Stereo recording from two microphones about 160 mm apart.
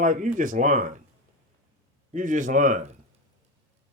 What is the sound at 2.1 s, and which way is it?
Speech, 50° right (ahead or behind).